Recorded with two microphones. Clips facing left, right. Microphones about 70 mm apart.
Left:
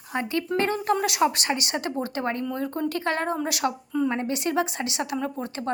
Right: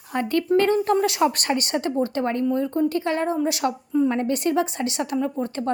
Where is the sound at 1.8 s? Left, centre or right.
Left.